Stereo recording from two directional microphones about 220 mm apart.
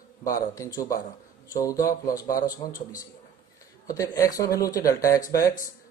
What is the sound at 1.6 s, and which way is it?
Speech, 15° left (ahead or behind).